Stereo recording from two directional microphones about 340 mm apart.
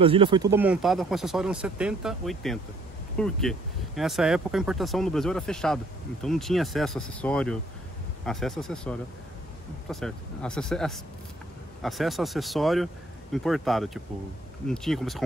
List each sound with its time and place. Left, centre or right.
0.0 s speech: centre